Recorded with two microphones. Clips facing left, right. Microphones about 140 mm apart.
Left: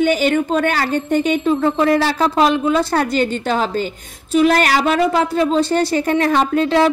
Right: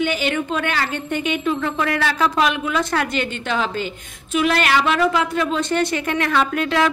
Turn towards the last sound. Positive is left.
turn(degrees=30)  # may be behind; listen again after turning